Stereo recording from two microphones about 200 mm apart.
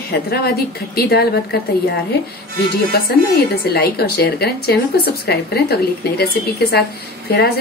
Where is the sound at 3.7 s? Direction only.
50° left (ahead or behind).